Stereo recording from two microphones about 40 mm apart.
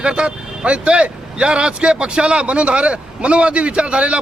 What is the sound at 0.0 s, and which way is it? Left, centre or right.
A man's voice, right.